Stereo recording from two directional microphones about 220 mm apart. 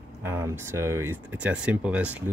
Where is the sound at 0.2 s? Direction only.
10° right (ahead or behind).